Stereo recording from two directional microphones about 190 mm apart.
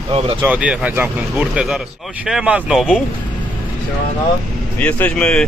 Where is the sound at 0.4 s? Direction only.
5° right (ahead or behind).